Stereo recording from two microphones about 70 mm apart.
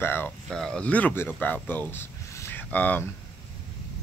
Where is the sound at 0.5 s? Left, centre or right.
Centre; by 2.0 s left.